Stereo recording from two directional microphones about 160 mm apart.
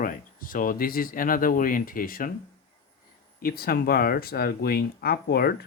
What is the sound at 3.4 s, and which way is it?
Speech, 70° left (ahead or behind).